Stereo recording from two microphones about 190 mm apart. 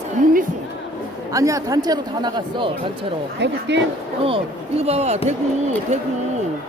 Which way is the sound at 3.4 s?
65° right (ahead or behind).